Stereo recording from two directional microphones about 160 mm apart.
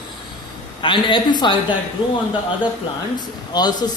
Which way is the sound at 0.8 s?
30° left (ahead or behind).